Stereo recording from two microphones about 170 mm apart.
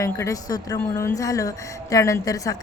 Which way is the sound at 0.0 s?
20° left (ahead or behind).